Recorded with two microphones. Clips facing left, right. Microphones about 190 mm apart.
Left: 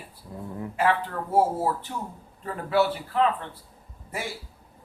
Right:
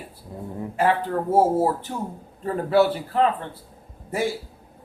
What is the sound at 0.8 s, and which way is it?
Speech, 40° right (ahead or behind).